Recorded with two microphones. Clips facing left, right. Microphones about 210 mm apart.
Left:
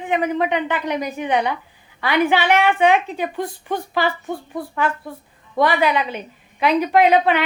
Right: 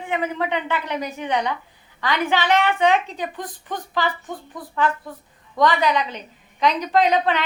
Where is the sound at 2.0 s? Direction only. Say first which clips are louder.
Left 4 dB; 15° left (ahead or behind).